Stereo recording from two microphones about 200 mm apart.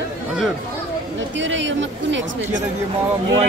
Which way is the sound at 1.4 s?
65° right (ahead or behind).